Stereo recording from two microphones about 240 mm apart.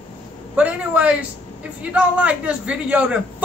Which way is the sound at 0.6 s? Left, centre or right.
Centre.